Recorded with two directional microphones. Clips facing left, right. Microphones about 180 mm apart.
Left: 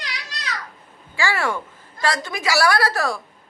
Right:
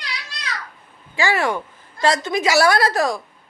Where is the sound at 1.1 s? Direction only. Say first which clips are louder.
Right 3 dB; 20° right (ahead or behind).